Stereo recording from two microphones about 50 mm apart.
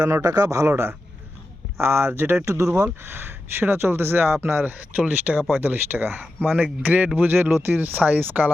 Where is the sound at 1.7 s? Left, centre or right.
Right.